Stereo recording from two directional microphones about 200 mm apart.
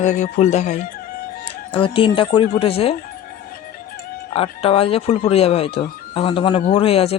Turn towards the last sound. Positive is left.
turn(degrees=30)  # may be behind; listen again after turning